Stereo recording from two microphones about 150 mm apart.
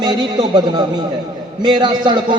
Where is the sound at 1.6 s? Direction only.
30° right (ahead or behind).